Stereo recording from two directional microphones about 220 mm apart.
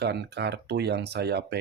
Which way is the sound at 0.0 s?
50° right (ahead or behind).